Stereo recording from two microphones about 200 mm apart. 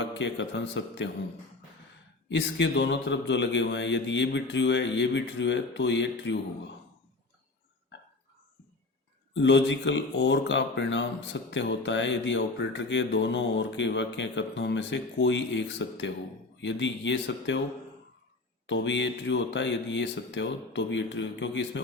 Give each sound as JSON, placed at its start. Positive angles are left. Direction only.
{"t": 0.0, "sound": "speech", "side_deg": 65}
{"t": 2.3, "sound": "speech", "side_deg": 60}
{"t": 9.3, "sound": "speech", "side_deg": 65}
{"t": 18.6, "sound": "speech", "side_deg": 65}